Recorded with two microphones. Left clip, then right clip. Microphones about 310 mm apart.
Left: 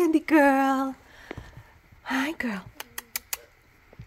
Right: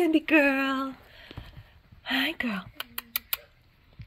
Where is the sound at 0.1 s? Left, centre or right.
Centre.